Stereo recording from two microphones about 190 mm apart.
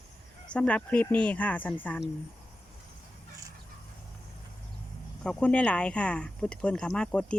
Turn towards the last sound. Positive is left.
turn(degrees=5)  # may be behind; listen again after turning